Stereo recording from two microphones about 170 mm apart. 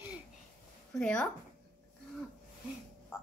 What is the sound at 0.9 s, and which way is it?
Speech, 5° left (ahead or behind).